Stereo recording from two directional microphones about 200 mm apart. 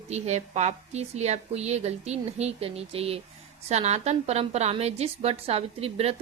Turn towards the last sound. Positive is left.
turn(degrees=-30)  # may be behind; listen again after turning